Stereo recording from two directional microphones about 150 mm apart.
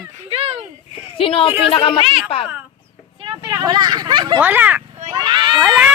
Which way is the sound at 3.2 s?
30° right (ahead or behind).